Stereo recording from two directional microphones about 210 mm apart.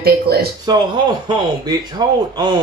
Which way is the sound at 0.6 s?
20° right (ahead or behind).